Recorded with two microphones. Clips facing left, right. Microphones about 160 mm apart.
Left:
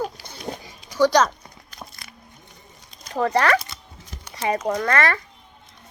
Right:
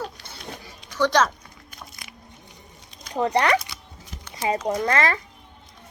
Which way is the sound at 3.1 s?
20° right (ahead or behind).